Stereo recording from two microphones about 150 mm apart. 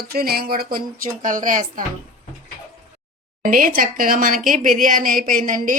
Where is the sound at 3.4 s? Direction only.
70° right (ahead or behind).